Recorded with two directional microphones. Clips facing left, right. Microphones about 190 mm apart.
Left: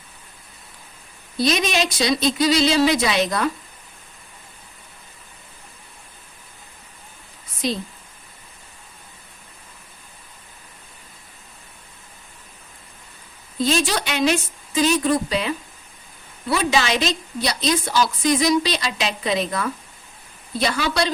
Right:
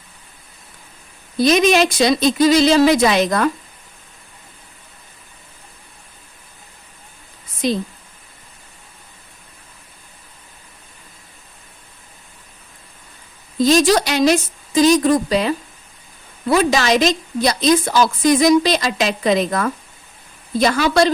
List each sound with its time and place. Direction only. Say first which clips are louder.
1.4 s a woman's voice: right 7 dB; 50° right (ahead or behind)
13.6 s a woman's voice: right 8 dB; 40° right (ahead or behind)